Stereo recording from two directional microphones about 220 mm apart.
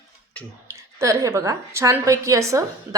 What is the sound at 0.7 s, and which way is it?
A woman's voice, 15° right (ahead or behind).